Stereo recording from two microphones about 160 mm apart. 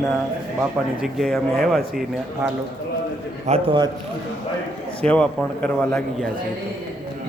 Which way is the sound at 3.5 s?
45° right (ahead or behind).